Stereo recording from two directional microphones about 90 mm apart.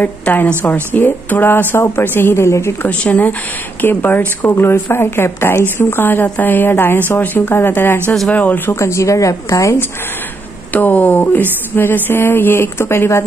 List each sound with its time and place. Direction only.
0.0 s speech: 20° left (ahead or behind)
2.9 s speech: 15° left (ahead or behind)
8.7 s speech: 35° left (ahead or behind)
10.7 s speech: 15° left (ahead or behind)